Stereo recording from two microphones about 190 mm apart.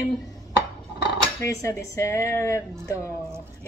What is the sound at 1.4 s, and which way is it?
A woman's voice, 15° left (ahead or behind).